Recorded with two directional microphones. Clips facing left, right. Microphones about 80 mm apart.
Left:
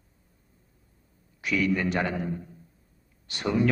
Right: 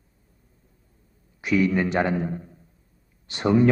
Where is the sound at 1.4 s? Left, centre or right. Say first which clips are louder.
Right 4 dB; right.